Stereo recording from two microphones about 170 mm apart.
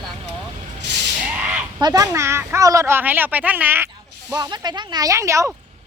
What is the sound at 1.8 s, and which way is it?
Speech, 20° right (ahead or behind).